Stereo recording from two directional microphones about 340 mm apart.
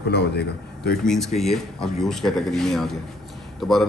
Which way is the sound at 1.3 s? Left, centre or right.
Centre.